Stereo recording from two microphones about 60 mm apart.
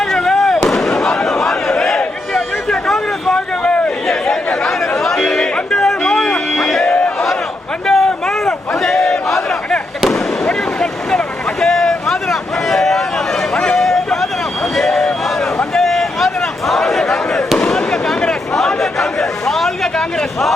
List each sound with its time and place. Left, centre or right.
0.0 s fireworks: centre
0.9 s a sound: centre
4.0 s chatter: centre
6.5 s music: centre
6.9 s crowd: centre
10.0 s fireworks: centre
11.6 s a sound: centre